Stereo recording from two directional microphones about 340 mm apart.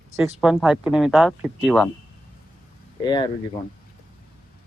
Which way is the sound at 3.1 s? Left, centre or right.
Centre.